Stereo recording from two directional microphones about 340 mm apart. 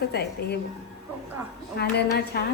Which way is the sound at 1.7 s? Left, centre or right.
Left.